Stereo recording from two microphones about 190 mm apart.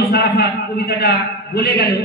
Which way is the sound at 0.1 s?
55° left (ahead or behind).